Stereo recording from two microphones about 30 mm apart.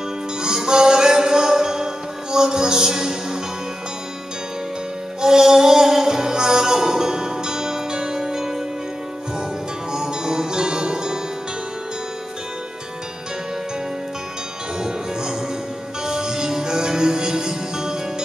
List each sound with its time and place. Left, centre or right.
0.4 s music: right
5.2 s music: right
9.9 s music: right
16.1 s music: right